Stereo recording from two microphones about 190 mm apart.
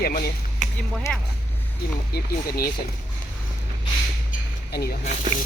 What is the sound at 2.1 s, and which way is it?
Speech, 55° left (ahead or behind).